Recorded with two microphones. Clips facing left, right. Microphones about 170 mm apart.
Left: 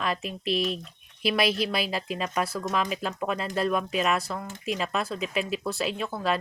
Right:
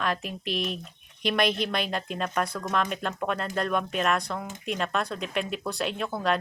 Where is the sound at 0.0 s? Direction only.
Centre (ahead or behind).